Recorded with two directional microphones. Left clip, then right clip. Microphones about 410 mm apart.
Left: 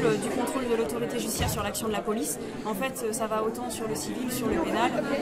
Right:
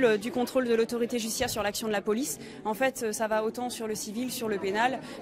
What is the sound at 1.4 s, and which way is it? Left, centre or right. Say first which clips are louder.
Speech: right 1 dB; left.